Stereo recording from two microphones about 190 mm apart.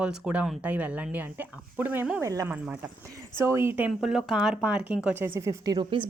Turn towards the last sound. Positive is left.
turn(degrees=-25)  # may be behind; listen again after turning